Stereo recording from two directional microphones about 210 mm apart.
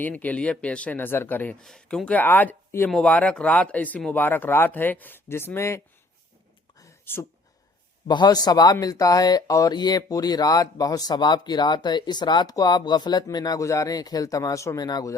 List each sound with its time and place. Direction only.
0.0 s speech: 5° left (ahead or behind)
6.7 s whispering: 10° left (ahead or behind)
8.0 s speech: 20° left (ahead or behind)